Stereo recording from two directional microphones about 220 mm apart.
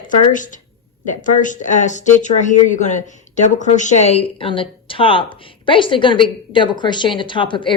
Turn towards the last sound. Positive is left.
turn(degrees=20)  # may be behind; listen again after turning